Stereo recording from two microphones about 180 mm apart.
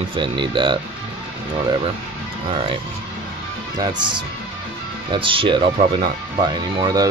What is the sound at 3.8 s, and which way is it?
Speech, 25° right (ahead or behind).